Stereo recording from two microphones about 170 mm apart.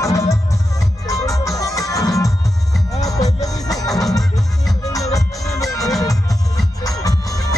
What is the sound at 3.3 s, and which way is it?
Music, 20° left (ahead or behind).